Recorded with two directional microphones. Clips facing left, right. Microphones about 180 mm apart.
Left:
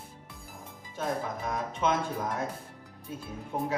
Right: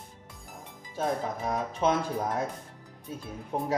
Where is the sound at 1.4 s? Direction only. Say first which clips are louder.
Right 3 dB; 35° right (ahead or behind).